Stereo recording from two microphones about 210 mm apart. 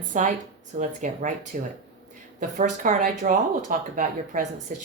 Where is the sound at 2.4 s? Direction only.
35° right (ahead or behind).